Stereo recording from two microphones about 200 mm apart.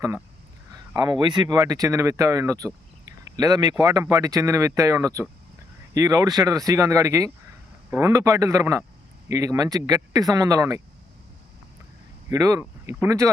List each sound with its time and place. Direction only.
0.7 s speech: 20° right (ahead or behind)
12.3 s speech: 15° right (ahead or behind)